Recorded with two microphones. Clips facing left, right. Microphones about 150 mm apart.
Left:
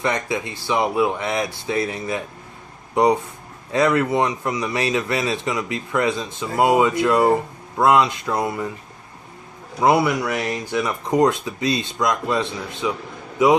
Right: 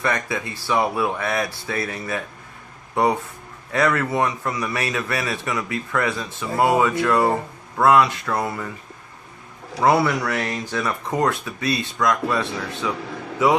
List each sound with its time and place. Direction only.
0.0 s speech: 20° left (ahead or behind)
9.8 s speech: 15° left (ahead or behind)